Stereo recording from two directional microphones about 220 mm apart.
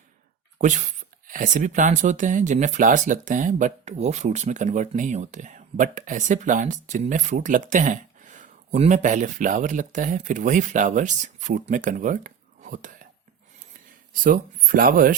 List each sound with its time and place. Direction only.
0.6 s speech: 35° right (ahead or behind)